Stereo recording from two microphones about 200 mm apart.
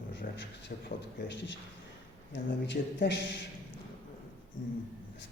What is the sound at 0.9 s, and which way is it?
Speech, 60° left (ahead or behind).